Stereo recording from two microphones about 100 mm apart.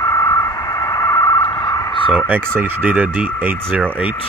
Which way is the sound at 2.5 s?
15° right (ahead or behind).